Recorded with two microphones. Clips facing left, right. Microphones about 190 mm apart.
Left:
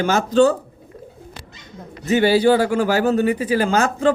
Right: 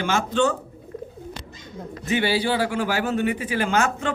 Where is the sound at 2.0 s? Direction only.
40° left (ahead or behind).